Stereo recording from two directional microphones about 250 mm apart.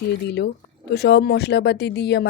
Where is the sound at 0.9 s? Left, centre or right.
Left.